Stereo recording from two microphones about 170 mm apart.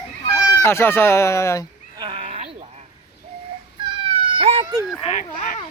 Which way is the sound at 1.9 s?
30° right (ahead or behind).